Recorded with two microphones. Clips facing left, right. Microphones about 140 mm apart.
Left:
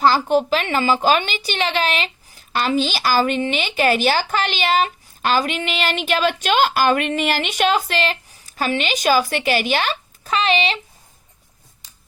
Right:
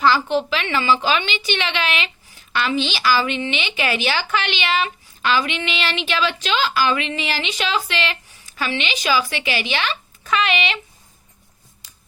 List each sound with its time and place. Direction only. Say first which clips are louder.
0.0 s a woman's voice: left 2 dB; 45° left (ahead or behind)